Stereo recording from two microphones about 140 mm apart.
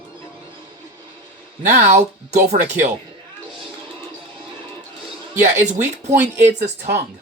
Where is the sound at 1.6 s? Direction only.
60° right (ahead or behind).